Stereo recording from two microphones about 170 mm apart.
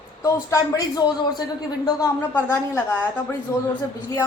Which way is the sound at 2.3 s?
15° left (ahead or behind).